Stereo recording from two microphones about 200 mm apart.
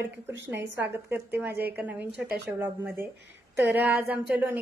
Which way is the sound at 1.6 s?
10° right (ahead or behind).